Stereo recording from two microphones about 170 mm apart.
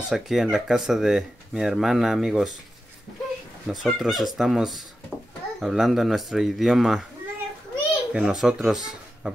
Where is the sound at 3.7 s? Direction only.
Centre (ahead or behind).